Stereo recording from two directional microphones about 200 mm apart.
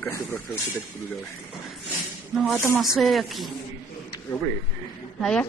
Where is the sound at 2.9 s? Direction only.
Centre (ahead or behind).